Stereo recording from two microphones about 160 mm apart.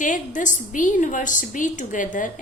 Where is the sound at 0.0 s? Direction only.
55° left (ahead or behind).